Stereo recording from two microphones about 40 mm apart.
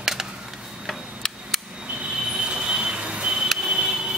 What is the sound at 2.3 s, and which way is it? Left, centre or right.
Vehicle, right.